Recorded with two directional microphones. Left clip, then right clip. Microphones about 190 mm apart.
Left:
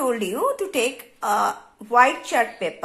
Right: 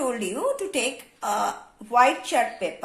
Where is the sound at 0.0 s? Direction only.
30° left (ahead or behind).